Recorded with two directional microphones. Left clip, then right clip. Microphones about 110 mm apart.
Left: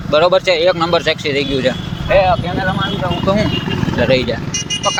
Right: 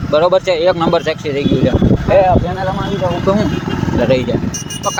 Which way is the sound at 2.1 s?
35° right (ahead or behind).